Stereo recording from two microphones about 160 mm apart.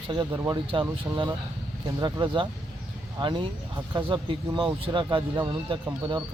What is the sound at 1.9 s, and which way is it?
Speech, 25° right (ahead or behind).